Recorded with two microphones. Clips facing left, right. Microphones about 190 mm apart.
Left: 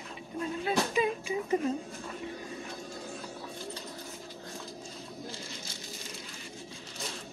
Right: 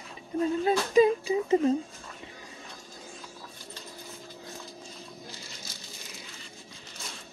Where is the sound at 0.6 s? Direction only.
35° right (ahead or behind).